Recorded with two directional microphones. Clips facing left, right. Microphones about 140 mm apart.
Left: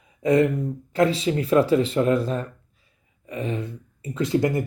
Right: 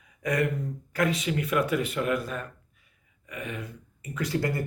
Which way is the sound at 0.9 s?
30° left (ahead or behind).